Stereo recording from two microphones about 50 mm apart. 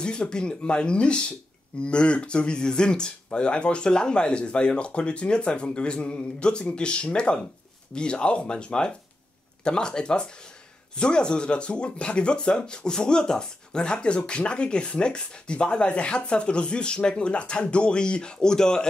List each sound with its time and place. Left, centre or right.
0.0 s speech: centre